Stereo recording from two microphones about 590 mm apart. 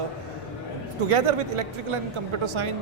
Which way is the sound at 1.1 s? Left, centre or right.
Right.